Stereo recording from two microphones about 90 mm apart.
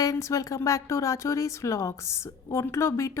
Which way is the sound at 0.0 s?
35° left (ahead or behind).